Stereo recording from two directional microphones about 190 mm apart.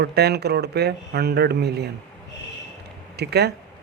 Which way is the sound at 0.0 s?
60° right (ahead or behind).